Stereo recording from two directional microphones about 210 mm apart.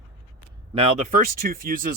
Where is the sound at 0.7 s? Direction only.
30° right (ahead or behind).